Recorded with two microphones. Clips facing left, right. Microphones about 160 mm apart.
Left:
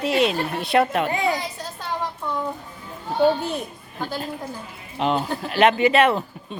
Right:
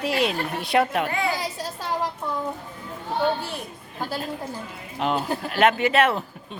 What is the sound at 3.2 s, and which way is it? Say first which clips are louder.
Speech: left 6 dB; 20° left (ahead or behind).